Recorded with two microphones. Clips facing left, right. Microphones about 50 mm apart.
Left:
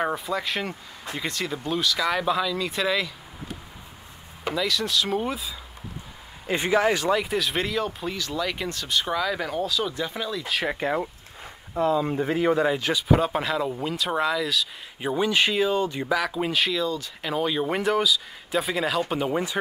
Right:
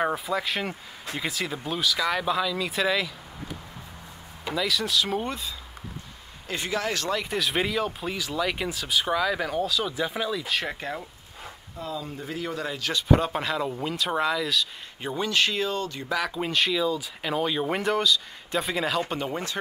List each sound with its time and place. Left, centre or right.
0.0 s speech: centre
4.6 s speech: centre
6.4 s speech: left
11.8 s speech: left
12.4 s speech: left
12.9 s speech: centre
15.0 s speech: centre
16.1 s speech: centre